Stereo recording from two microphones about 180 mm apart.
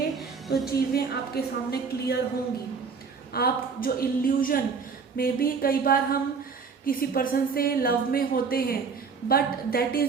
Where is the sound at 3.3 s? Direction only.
55° left (ahead or behind).